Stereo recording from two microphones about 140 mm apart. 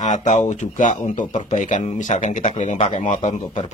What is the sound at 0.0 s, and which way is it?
Speech, 60° left (ahead or behind).